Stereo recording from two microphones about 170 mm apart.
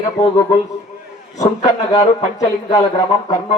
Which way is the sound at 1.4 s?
20° left (ahead or behind).